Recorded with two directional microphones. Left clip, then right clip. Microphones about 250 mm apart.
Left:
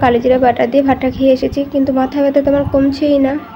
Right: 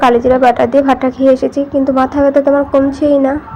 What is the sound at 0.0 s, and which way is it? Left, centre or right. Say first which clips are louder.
A woman's voice: right 2 dB; centre.